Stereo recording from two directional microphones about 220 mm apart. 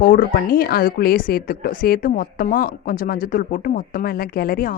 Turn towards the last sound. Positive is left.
turn(degrees=40)  # may be behind; listen again after turning